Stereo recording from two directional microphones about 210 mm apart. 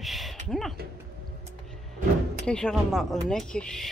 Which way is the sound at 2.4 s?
5° left (ahead or behind).